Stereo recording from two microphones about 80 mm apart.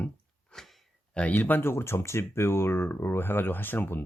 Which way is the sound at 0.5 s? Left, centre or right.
Centre.